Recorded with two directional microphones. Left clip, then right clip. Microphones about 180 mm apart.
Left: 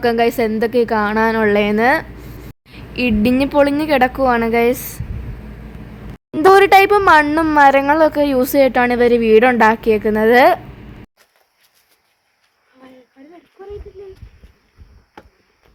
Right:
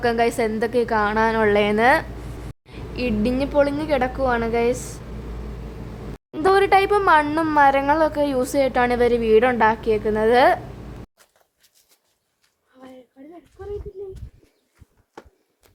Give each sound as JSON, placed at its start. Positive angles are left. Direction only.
{"t": 0.0, "sound": "a woman's voice", "side_deg": 25}
{"t": 2.5, "sound": "a woman's voice", "side_deg": 35}
{"t": 6.3, "sound": "a woman's voice", "side_deg": 30}